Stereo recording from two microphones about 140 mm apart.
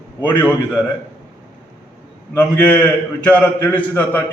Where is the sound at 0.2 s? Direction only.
10° left (ahead or behind).